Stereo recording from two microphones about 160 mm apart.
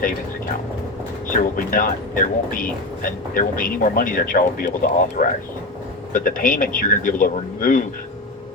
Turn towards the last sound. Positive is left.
turn(degrees=60)  # may be behind; listen again after turning